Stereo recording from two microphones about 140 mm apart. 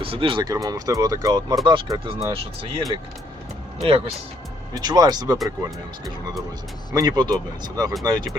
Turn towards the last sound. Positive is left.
turn(degrees=-25)  # may be behind; listen again after turning